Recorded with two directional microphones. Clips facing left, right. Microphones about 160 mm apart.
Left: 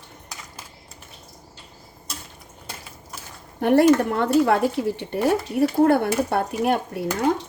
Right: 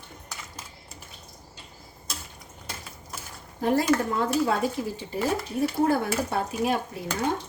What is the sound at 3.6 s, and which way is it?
Speech, 65° left (ahead or behind).